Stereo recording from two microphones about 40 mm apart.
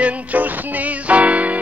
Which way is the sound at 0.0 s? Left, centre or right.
Right.